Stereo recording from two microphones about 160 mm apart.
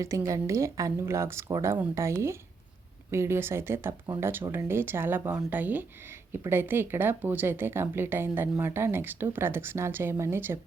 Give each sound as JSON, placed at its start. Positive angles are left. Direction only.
{"t": 0.0, "sound": "speech", "side_deg": -20}